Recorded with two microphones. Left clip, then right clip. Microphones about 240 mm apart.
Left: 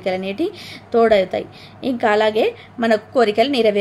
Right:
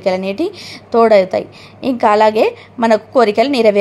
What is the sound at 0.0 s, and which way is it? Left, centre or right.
A woman's voice, centre.